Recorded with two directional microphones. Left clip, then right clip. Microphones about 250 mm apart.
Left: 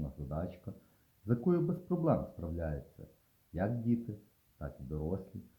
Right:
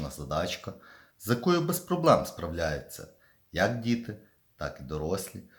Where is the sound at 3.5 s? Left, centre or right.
Centre.